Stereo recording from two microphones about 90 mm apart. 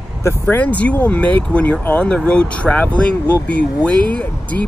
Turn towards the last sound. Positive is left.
turn(degrees=15)  # may be behind; listen again after turning